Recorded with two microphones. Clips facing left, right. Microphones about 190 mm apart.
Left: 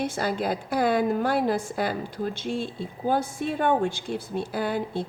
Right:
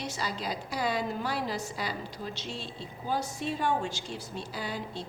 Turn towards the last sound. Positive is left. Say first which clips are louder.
# left 9 dB
turn(degrees=55)  # may be behind; listen again after turning